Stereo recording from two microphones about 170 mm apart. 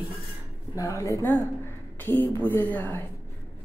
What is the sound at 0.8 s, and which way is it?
Speech, 20° left (ahead or behind).